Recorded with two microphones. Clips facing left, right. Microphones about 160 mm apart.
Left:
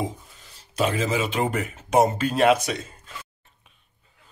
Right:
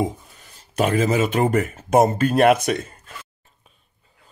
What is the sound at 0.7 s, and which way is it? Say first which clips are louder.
Speech: right 5 dB; 50° right (ahead or behind).